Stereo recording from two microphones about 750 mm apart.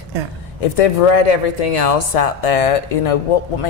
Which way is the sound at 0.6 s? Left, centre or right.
Left.